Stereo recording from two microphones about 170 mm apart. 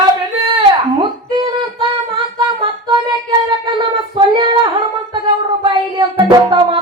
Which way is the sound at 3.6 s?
30° right (ahead or behind).